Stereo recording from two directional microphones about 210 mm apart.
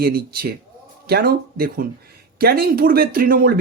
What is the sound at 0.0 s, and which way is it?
Speech, 45° right (ahead or behind).